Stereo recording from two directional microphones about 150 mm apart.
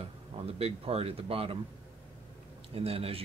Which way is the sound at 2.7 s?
40° right (ahead or behind).